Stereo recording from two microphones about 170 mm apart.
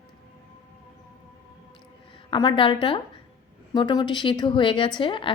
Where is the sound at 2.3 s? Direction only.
30° left (ahead or behind).